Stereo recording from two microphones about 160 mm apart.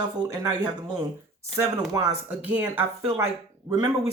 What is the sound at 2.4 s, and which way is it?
Speech, 10° right (ahead or behind).